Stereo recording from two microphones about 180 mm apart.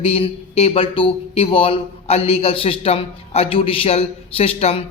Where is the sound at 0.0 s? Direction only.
35° left (ahead or behind).